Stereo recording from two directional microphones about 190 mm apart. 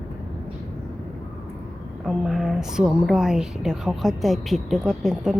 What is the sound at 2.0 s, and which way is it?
A woman's voice, centre (ahead or behind).